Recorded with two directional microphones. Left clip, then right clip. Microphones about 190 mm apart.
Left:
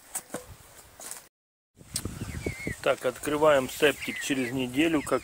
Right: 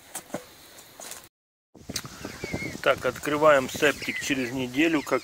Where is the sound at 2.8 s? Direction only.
10° left (ahead or behind).